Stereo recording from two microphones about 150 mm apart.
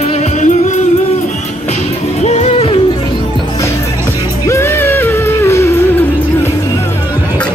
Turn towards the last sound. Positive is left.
turn(degrees=15)  # may be behind; listen again after turning